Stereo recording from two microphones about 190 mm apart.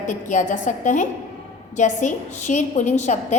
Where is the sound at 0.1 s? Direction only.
40° left (ahead or behind).